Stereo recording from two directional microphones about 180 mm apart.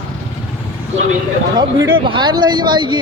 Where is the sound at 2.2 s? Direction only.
25° right (ahead or behind).